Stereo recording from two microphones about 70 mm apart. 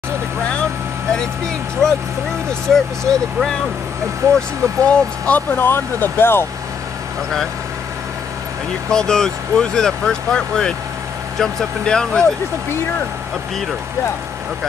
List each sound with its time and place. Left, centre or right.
1.8 s speech: centre
4.4 s speech: centre
5.6 s speech: left
8.9 s speech: centre